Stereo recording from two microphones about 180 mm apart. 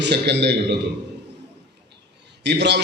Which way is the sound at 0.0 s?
70° right (ahead or behind).